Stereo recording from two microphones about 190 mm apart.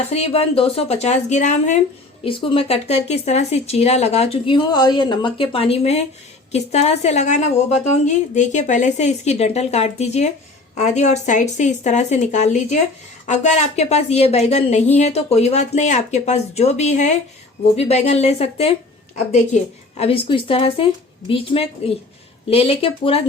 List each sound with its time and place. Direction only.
0.1 s speech: 35° left (ahead or behind)
2.2 s speech: 25° left (ahead or behind)
20.0 s speech: 30° left (ahead or behind)